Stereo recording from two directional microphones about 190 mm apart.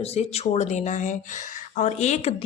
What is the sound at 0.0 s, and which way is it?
A woman's voice, 35° left (ahead or behind).